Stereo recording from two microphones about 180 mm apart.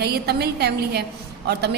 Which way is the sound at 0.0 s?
65° right (ahead or behind).